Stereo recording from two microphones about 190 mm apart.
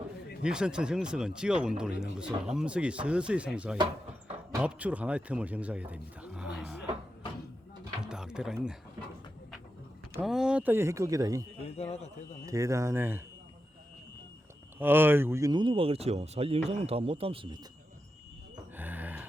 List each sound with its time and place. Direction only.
0.4 s speech: 5° right (ahead or behind)
8.0 s a sound: 5° right (ahead or behind)
10.2 s speech: 5° right (ahead or behind)
11.6 s a man's voice: 35° left (ahead or behind)
12.5 s speech: 15° right (ahead or behind)
14.8 s speech: 10° right (ahead or behind); by 17.6 s 30° right (ahead or behind)
18.8 s a sound: 10° right (ahead or behind)